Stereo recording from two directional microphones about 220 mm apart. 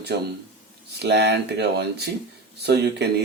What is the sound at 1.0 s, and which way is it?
Speech, 50° right (ahead or behind).